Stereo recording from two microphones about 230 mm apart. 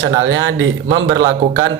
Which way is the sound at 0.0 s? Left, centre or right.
Right.